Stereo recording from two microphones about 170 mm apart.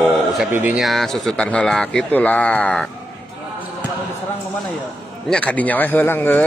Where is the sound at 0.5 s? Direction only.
10° right (ahead or behind).